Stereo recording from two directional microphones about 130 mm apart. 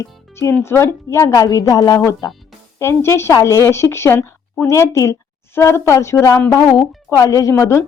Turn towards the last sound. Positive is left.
turn(degrees=25)  # may be behind; listen again after turning